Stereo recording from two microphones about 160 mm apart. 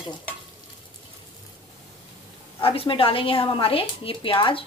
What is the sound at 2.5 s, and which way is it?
A woman's voice, 35° left (ahead or behind).